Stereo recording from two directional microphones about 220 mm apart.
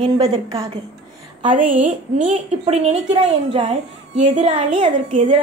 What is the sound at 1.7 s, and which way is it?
A woman's voice, 35° right (ahead or behind).